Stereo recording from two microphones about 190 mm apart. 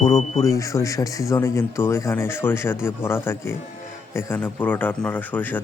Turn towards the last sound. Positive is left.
turn(degrees=10)  # may be behind; listen again after turning